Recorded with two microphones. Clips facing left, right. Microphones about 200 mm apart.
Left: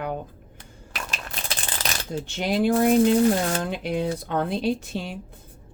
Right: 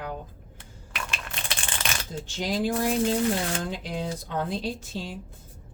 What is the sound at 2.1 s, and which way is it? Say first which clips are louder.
Speech: left 5 dB; 65° left (ahead or behind).